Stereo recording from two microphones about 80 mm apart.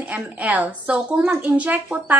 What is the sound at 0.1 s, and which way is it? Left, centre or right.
A woman's voice, centre.